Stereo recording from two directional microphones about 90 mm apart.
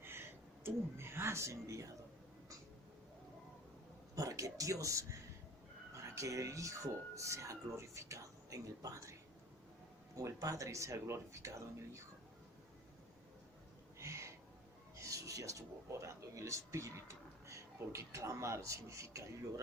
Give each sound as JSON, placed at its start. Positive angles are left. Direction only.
{"t": 0.0, "sound": "speech", "side_deg": -25}
{"t": 4.1, "sound": "speech", "side_deg": -40}
{"t": 10.2, "sound": "speech", "side_deg": -35}
{"t": 14.0, "sound": "a sound", "side_deg": -35}
{"t": 17.4, "sound": "speech", "side_deg": -35}